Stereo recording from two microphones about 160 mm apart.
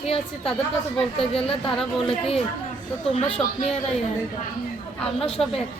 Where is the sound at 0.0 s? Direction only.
35° left (ahead or behind).